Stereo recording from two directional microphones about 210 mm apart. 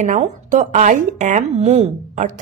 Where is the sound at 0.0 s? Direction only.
35° right (ahead or behind).